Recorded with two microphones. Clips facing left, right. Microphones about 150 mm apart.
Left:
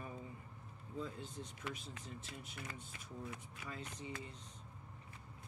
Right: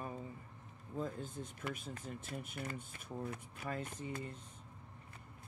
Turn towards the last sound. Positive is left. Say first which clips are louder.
# right 4 dB
turn(degrees=-50)  # may be behind; listen again after turning